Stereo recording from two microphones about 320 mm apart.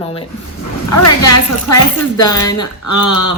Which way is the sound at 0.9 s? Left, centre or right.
Left.